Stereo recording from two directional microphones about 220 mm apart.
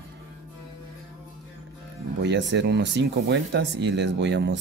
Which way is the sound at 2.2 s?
55° right (ahead or behind).